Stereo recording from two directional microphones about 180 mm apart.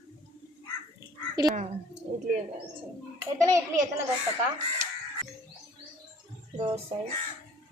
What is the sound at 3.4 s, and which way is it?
Speech, 15° right (ahead or behind).